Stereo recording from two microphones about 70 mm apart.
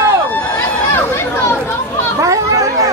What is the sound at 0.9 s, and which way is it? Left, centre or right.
Chatter, left.